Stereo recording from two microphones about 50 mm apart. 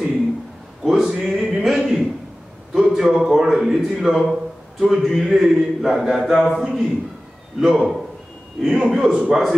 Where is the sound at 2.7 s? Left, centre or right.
Centre.